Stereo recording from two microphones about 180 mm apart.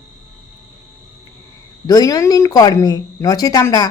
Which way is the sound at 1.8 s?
20° left (ahead or behind).